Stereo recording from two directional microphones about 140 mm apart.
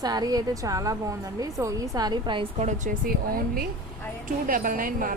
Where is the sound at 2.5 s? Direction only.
60° right (ahead or behind).